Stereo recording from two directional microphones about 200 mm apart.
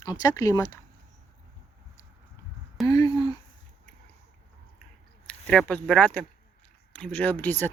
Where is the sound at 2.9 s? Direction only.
20° left (ahead or behind).